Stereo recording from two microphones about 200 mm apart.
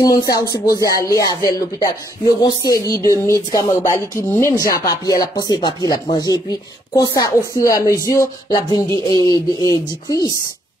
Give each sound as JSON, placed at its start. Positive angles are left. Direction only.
{"t": 0.0, "sound": "speech", "side_deg": 20}